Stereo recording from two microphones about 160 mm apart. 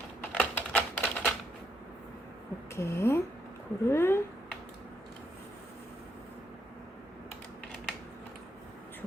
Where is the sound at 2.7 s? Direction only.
15° left (ahead or behind).